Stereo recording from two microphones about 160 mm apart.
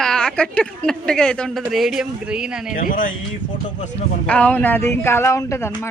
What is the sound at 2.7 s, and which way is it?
Speech, 60° left (ahead or behind).